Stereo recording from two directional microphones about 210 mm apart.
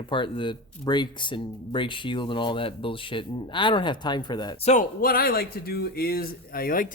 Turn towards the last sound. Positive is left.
turn(degrees=45)  # may be behind; listen again after turning